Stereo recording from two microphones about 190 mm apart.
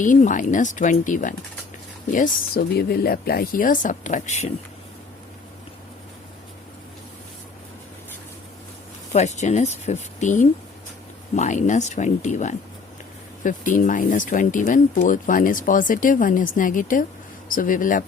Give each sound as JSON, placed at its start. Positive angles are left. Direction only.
{"t": 0.0, "sound": "speech", "side_deg": 40}
{"t": 9.1, "sound": "speech", "side_deg": 35}